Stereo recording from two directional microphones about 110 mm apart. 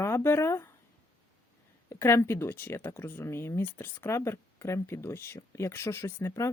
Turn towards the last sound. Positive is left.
turn(degrees=25)  # may be behind; listen again after turning